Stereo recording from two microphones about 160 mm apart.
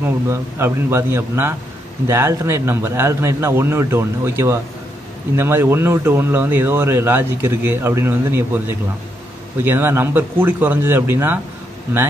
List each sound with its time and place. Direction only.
0.3 s speech: 15° right (ahead or behind)